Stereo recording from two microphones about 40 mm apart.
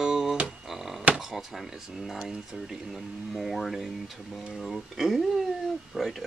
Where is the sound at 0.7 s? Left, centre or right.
Centre.